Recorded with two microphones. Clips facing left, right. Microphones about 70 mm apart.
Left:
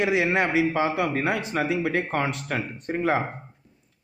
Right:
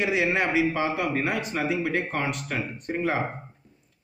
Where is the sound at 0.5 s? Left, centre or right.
Left.